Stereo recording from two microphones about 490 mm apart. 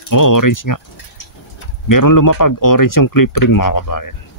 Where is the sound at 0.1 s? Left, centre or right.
Left.